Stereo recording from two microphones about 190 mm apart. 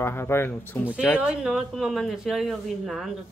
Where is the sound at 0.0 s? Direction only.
15° left (ahead or behind).